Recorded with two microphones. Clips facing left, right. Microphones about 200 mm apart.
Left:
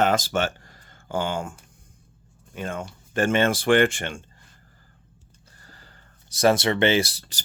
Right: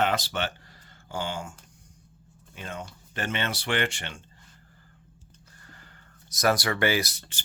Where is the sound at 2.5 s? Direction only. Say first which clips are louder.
Left 7 dB; 50° left (ahead or behind).